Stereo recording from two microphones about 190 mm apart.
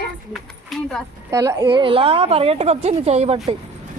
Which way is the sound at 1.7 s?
25° right (ahead or behind).